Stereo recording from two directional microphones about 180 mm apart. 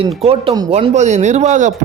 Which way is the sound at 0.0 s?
30° right (ahead or behind).